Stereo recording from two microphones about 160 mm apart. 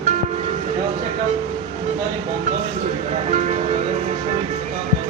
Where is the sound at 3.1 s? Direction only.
40° right (ahead or behind).